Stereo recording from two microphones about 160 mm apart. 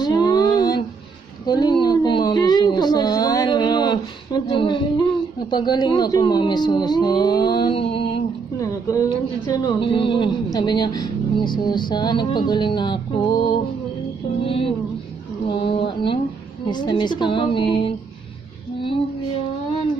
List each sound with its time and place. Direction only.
0.0 s a sound: 25° left (ahead or behind)
5.5 s a woman's voice: 25° left (ahead or behind)
8.5 s a woman's voice: 20° left (ahead or behind)
14.4 s music: 35° left (ahead or behind)
15.5 s a sound: 30° left (ahead or behind)
16.6 s a woman's voice: 30° left (ahead or behind)